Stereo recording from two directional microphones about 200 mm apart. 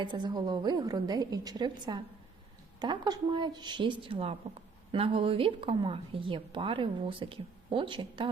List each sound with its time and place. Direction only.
0.0 s speech: 20° right (ahead or behind)